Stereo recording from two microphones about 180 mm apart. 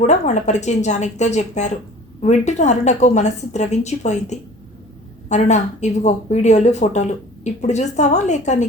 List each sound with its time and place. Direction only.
0.0 s a woman's voice: 40° left (ahead or behind)